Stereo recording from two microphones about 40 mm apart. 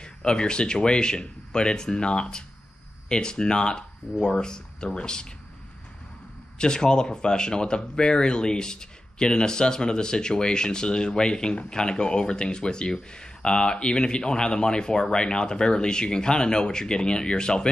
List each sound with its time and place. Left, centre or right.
0.0 s speech: left
6.6 s speech: centre